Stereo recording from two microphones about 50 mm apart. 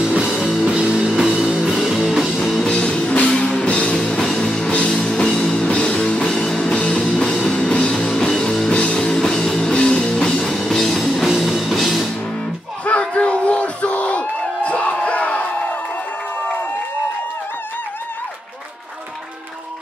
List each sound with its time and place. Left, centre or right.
0.1 s music: centre
2.6 s music: centre
13.0 s crowd: left